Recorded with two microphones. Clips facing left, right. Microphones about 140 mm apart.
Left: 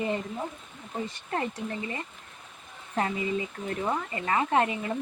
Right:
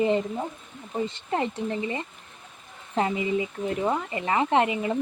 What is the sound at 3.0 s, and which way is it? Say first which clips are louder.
Speech: right 4 dB; 20° right (ahead or behind).